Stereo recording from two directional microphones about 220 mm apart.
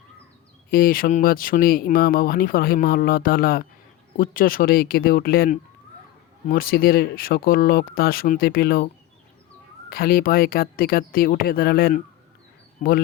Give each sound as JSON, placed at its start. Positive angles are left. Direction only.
{"t": 0.7, "sound": "speech", "side_deg": 40}
{"t": 9.9, "sound": "speech", "side_deg": 40}